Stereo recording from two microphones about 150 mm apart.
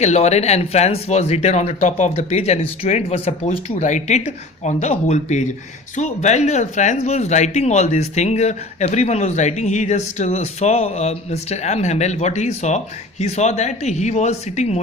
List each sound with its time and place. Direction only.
0.0 s speech: 45° left (ahead or behind)